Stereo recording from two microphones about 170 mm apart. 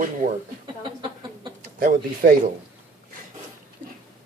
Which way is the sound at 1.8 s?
50° right (ahead or behind).